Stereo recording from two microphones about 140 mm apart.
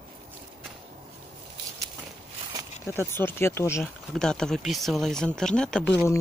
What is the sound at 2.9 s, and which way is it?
Speech, 15° left (ahead or behind).